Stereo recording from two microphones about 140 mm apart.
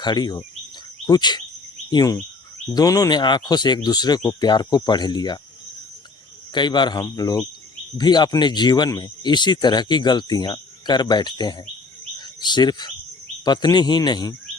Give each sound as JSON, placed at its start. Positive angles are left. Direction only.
{"t": 0.0, "sound": "speech", "side_deg": 30}
{"t": 6.5, "sound": "speech", "side_deg": 35}